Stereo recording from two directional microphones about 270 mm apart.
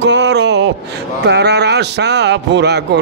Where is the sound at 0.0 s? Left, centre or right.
Right.